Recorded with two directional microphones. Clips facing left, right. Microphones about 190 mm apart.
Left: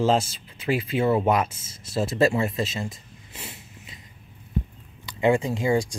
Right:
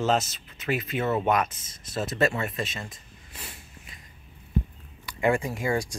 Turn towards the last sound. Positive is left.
turn(degrees=20)  # may be behind; listen again after turning